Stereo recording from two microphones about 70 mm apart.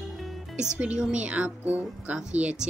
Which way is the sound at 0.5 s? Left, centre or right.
Centre.